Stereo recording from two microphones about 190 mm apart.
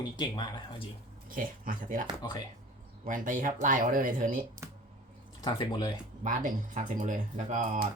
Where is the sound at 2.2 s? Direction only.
20° left (ahead or behind).